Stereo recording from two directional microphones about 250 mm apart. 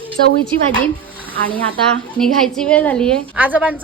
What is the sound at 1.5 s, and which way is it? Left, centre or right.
Speech, centre.